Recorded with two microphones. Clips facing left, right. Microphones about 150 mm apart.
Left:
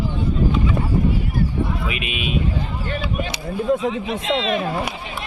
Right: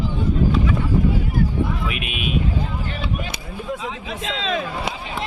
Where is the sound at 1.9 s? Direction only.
Centre (ahead or behind).